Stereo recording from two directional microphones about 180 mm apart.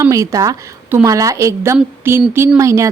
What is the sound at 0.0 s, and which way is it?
A woman's voice, 15° right (ahead or behind).